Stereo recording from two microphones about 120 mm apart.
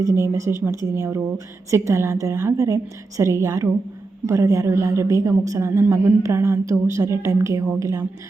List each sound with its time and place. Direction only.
0.0 s a woman's voice: 25° right (ahead or behind)